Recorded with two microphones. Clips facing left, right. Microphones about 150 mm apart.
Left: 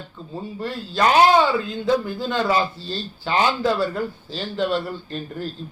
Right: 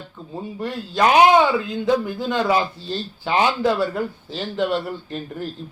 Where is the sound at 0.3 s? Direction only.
20° right (ahead or behind).